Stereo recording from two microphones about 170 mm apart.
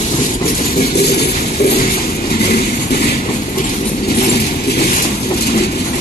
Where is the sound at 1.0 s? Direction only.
70° left (ahead or behind).